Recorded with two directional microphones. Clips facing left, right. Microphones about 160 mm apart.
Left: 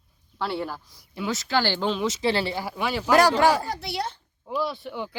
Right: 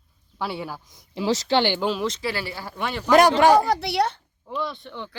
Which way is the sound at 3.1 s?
20° right (ahead or behind).